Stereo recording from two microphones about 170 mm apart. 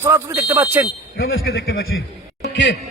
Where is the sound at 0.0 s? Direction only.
10° right (ahead or behind).